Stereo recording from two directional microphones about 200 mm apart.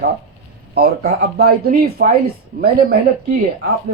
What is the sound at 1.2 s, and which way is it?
Speech, 50° right (ahead or behind).